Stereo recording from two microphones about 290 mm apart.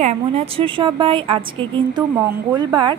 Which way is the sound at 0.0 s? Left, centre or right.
Right.